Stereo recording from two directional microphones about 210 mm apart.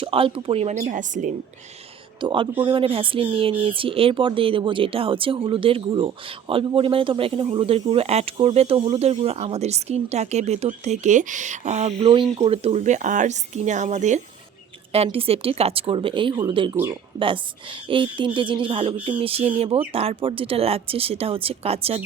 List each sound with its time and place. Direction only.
0.0 s speech: 25° right (ahead or behind)
2.2 s speech: 25° right (ahead or behind)